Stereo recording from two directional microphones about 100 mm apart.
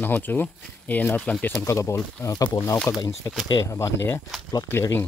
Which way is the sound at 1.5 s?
30° left (ahead or behind).